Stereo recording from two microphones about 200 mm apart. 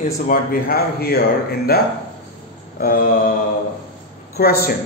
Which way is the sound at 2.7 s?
45° left (ahead or behind).